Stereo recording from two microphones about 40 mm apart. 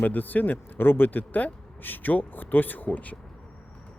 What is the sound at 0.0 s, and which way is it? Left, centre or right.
Speech, left.